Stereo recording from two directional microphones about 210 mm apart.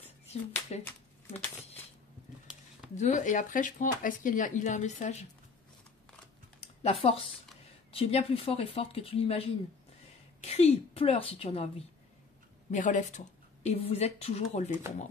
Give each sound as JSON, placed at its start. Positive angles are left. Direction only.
{"t": 0.3, "sound": "speech", "side_deg": 30}
{"t": 0.8, "sound": "a sound", "side_deg": 10}
{"t": 3.0, "sound": "speech", "side_deg": 35}
{"t": 6.6, "sound": "speech", "side_deg": 30}
{"t": 12.7, "sound": "speech", "side_deg": 35}